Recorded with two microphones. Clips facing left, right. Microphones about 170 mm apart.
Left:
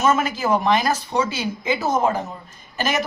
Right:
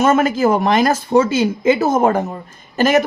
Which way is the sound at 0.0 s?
50° right (ahead or behind).